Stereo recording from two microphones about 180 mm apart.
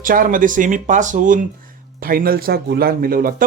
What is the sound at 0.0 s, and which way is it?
Speech, 50° right (ahead or behind).